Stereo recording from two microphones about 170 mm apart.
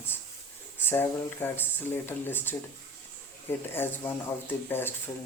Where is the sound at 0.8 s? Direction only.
10° left (ahead or behind).